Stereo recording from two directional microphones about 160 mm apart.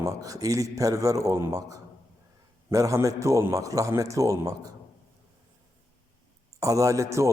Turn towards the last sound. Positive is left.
turn(degrees=-20)  # may be behind; listen again after turning